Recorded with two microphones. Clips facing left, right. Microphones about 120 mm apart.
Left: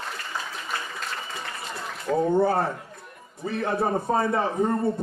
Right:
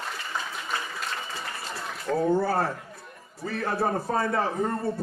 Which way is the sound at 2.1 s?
20° left (ahead or behind).